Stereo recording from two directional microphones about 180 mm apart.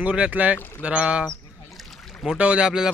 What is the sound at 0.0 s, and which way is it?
A man's voice, 5° right (ahead or behind).